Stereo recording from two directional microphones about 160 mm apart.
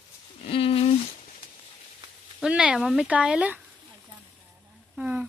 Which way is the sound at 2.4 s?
5° right (ahead or behind).